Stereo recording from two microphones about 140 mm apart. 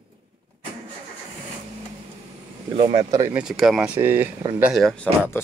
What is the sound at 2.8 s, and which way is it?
Speech, 45° right (ahead or behind).